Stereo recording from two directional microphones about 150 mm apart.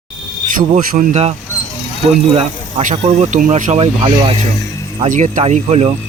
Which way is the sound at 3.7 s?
40° right (ahead or behind).